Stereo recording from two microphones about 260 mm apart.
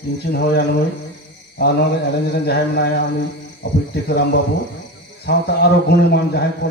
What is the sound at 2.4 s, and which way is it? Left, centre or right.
Speech, left.